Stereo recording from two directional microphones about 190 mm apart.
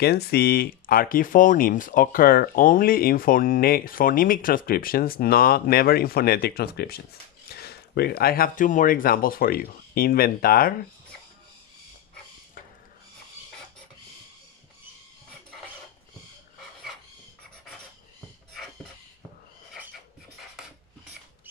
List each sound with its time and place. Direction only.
0.0 s speech: 55° left (ahead or behind)